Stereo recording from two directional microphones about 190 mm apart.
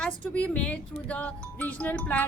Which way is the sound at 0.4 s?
5° left (ahead or behind).